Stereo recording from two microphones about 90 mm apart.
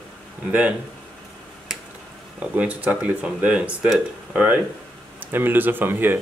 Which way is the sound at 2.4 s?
15° right (ahead or behind).